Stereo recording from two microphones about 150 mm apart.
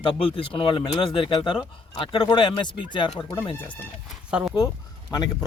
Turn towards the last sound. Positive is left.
turn(degrees=30)  # may be behind; listen again after turning